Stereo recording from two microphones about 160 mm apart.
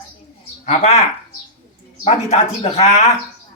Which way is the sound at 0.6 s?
45° left (ahead or behind).